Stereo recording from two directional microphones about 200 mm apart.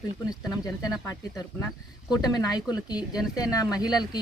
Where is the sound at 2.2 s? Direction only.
20° left (ahead or behind).